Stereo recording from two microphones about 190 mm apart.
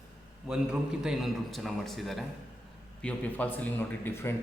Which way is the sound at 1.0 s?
Centre (ahead or behind).